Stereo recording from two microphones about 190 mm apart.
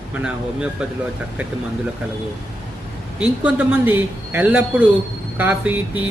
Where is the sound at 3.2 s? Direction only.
10° right (ahead or behind).